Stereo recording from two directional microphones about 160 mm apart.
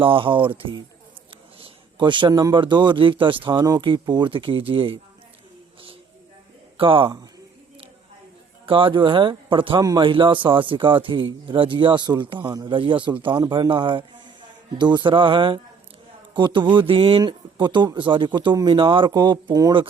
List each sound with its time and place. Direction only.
0.0 s speech: 35° right (ahead or behind)
6.7 s a man's voice: 35° right (ahead or behind)
8.6 s speech: 30° right (ahead or behind)